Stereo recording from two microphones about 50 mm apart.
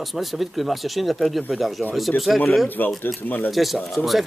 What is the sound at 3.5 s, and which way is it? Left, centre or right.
Speech, centre.